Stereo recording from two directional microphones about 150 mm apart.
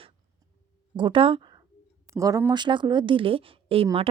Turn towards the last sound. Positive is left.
turn(degrees=-40)  # may be behind; listen again after turning